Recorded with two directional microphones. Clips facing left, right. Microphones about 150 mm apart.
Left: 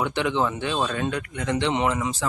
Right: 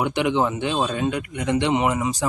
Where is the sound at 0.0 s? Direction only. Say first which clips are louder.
Right 3 dB; 15° right (ahead or behind).